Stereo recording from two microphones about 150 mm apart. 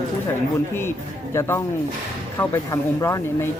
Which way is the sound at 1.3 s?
15° left (ahead or behind).